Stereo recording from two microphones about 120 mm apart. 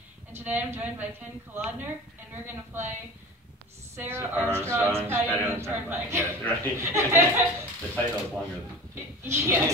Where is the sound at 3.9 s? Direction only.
20° right (ahead or behind).